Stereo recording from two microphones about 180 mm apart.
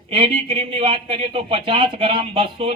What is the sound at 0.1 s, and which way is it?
Speech, 30° right (ahead or behind).